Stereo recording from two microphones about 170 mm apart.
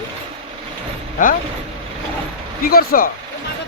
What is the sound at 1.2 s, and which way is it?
Speech, 50° left (ahead or behind).